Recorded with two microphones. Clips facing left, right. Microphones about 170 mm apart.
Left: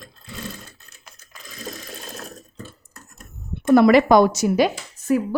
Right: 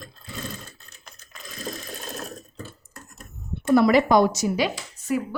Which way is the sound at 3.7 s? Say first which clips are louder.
Left 4 dB; 70° left (ahead or behind).